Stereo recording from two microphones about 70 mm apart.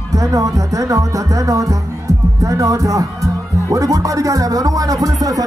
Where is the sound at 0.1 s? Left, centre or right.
Right.